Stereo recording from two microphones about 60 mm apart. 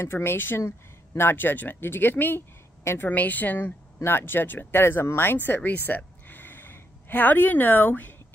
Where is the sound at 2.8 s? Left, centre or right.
Left.